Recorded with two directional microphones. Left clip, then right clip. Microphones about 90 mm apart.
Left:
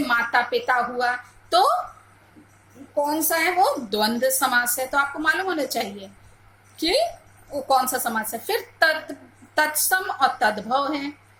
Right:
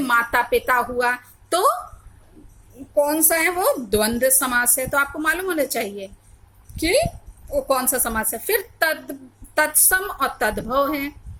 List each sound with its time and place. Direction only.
0.1 s a woman's voice: 55° right (ahead or behind); by 1.7 s 40° right (ahead or behind)
2.9 s a woman's voice: 40° right (ahead or behind)